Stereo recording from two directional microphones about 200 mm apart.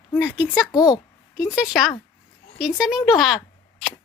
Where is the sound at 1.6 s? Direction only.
Centre (ahead or behind).